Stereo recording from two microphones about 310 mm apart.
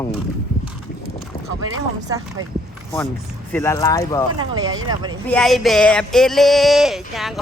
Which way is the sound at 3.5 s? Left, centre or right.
Centre.